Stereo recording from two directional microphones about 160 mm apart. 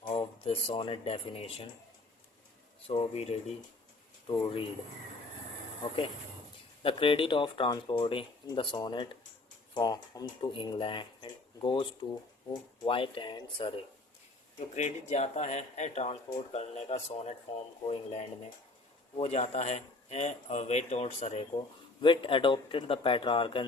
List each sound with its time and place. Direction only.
0.0 s speech: 35° left (ahead or behind)
2.8 s speech: 35° left (ahead or behind)
6.8 s speech: 35° left (ahead or behind)
14.8 s speech: 45° left (ahead or behind)